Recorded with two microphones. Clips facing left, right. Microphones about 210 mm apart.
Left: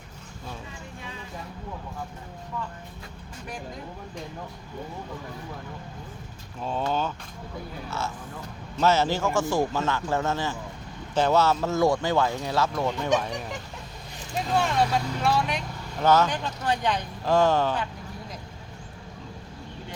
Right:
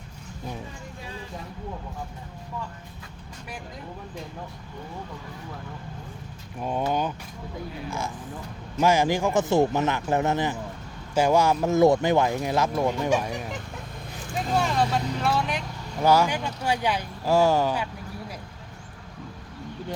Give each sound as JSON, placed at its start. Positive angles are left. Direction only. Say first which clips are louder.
{"t": 6.6, "sound": "speech", "louder": "right 1 dB", "side_deg": -10}